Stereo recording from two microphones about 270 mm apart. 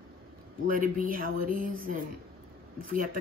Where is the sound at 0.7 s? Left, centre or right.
Right.